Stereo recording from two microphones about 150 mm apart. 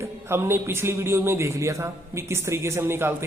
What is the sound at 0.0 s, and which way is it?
A man's voice, 15° right (ahead or behind).